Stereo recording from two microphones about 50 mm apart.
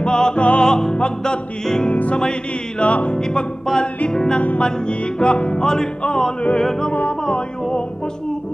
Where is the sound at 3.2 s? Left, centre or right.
Centre.